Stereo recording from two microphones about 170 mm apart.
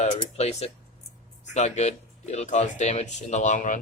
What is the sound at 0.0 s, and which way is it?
Speech, 40° left (ahead or behind).